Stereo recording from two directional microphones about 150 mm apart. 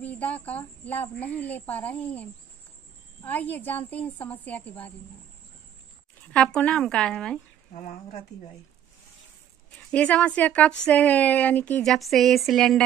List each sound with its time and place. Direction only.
0.0 s a woman's voice: 10° left (ahead or behind)
6.3 s speech: 5° left (ahead or behind)
7.7 s speech: 55° left (ahead or behind)
9.8 s a woman's voice: 10° left (ahead or behind)